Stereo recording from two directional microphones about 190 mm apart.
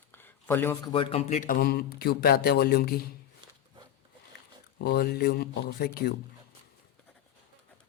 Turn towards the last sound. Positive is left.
turn(degrees=55)  # may be behind; listen again after turning